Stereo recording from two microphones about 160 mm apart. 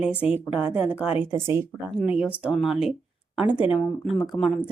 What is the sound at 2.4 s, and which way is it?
Speech, centre (ahead or behind).